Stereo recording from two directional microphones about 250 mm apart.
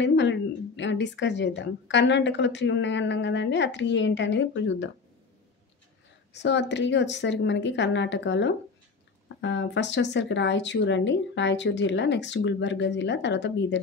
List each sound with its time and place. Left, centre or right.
0.0 s a woman's voice: left
6.3 s a woman's voice: left